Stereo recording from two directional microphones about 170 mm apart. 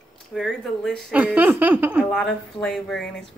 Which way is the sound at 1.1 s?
10° right (ahead or behind).